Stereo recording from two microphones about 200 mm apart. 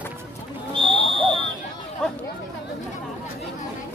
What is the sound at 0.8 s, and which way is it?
Buzzer, 25° right (ahead or behind).